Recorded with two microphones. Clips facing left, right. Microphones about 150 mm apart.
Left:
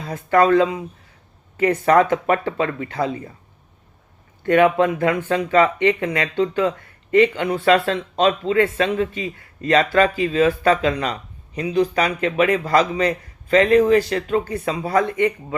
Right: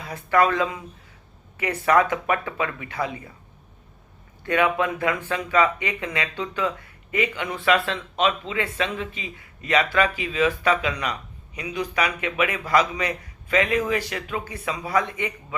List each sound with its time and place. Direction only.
0.3 s speech: 30° left (ahead or behind)
1.8 s speech: 35° left (ahead or behind)
4.4 s speech: 45° left (ahead or behind)
6.6 s a sound: 30° left (ahead or behind)
7.3 s speech: 35° left (ahead or behind)
15.0 s speech: 50° left (ahead or behind)